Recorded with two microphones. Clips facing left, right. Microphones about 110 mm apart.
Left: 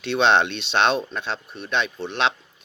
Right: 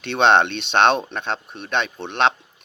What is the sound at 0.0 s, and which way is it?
Speech, 55° right (ahead or behind).